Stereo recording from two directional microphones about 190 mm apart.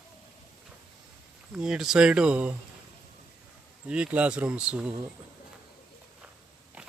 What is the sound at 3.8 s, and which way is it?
Speech, 5° right (ahead or behind).